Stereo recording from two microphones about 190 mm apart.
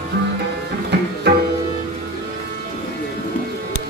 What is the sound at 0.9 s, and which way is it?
Tabla, 60° right (ahead or behind).